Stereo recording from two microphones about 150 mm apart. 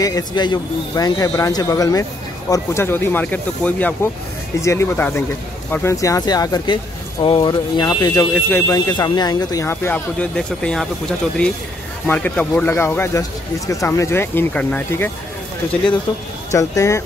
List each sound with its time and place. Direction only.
0.0 s speech: 25° left (ahead or behind); by 15.0 s 10° left (ahead or behind)
16.5 s speech: 20° left (ahead or behind)